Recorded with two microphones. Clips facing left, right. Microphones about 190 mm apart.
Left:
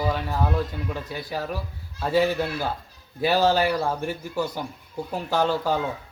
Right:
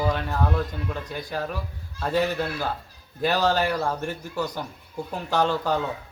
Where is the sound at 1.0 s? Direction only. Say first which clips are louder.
Even; 5° left (ahead or behind).